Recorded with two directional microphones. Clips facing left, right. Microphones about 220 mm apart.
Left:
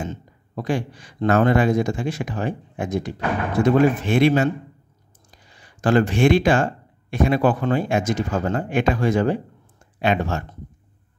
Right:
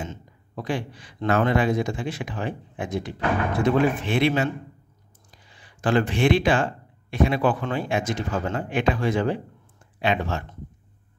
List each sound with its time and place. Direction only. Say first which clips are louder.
0.0 s speech: left 4 dB; 45° left (ahead or behind)
5.5 s speech: left 4 dB; 45° left (ahead or behind)